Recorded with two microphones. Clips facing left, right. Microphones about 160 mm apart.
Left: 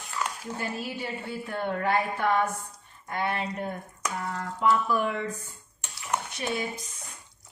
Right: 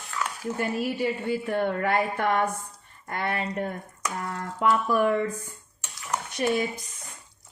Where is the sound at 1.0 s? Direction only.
65° right (ahead or behind).